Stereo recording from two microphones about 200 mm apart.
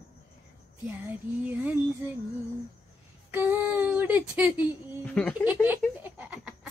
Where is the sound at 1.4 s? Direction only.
10° right (ahead or behind).